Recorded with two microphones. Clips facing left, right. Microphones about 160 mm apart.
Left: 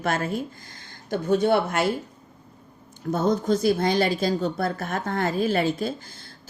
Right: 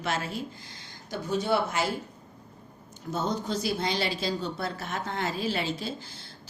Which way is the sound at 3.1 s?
50° left (ahead or behind).